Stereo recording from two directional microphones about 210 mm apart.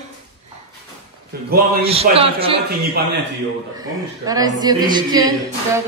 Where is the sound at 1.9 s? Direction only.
25° right (ahead or behind).